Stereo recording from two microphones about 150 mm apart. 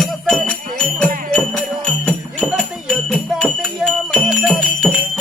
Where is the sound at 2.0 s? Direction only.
Centre (ahead or behind).